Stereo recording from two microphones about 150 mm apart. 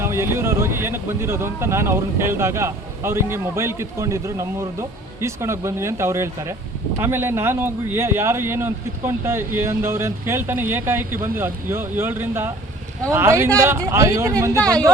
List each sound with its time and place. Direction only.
0.0 s speech: 15° right (ahead or behind)
14.6 s speech: 5° left (ahead or behind)